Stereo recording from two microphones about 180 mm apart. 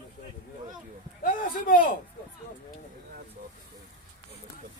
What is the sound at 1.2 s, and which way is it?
Speech, 50° left (ahead or behind).